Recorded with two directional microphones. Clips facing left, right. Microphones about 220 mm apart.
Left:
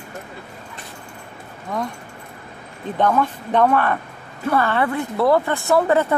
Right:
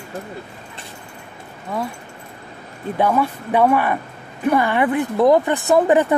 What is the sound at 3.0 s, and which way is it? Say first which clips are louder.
A woman's voice: even; 10° right (ahead or behind).